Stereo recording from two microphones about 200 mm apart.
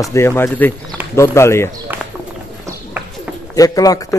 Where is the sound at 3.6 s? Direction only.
15° left (ahead or behind).